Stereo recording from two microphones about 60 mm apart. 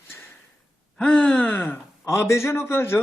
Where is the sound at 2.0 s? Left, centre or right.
Left.